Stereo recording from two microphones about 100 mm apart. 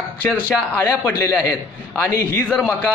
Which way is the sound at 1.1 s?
30° left (ahead or behind).